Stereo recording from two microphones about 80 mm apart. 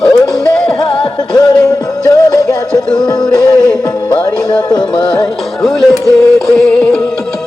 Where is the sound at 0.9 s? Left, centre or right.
Left.